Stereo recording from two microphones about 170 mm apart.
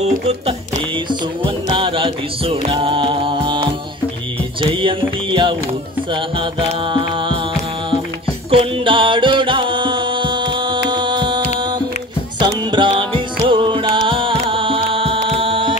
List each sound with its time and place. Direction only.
0.0 s speech: 35° right (ahead or behind)
1.4 s music: 30° right (ahead or behind)
6.9 s music: 30° right (ahead or behind)
8.5 s music: 30° right (ahead or behind)